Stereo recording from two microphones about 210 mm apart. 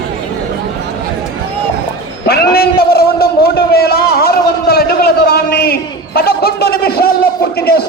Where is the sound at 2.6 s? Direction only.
50° left (ahead or behind).